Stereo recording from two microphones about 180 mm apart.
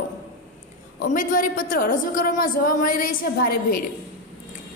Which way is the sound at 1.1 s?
50° left (ahead or behind).